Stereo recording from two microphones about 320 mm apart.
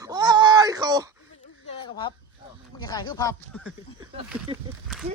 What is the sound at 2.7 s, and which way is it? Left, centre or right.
Speech, centre.